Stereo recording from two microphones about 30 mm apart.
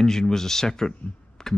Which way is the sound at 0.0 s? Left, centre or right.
Centre.